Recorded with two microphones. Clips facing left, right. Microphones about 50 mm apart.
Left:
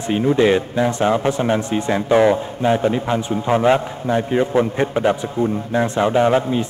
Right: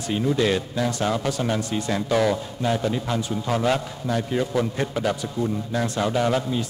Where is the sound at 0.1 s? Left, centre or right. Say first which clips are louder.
Left 7 dB; left.